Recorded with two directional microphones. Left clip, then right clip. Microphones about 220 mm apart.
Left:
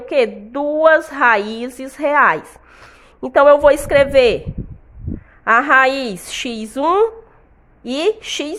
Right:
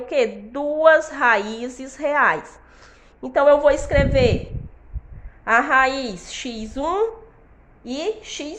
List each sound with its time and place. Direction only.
0.0 s a woman's voice: 30° left (ahead or behind)
5.5 s a woman's voice: 35° left (ahead or behind)